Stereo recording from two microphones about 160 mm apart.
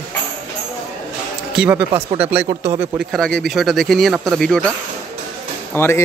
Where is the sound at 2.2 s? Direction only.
10° right (ahead or behind).